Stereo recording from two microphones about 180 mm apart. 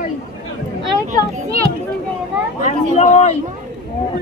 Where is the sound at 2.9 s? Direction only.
40° left (ahead or behind).